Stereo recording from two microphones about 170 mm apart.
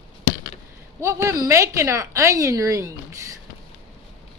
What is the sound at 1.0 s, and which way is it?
A woman's voice, 20° right (ahead or behind).